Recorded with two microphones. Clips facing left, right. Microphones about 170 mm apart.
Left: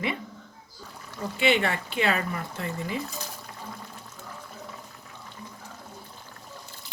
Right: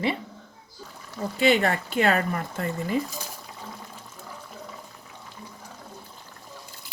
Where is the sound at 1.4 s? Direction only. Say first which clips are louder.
Right 3 dB; 40° right (ahead or behind).